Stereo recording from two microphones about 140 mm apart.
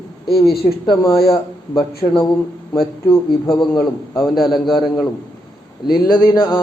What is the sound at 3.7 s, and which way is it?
Speech, 25° left (ahead or behind).